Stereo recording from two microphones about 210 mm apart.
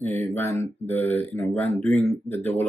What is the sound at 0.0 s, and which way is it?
Speech, 10° left (ahead or behind).